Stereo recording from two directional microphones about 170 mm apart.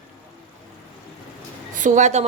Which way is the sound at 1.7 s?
45° right (ahead or behind).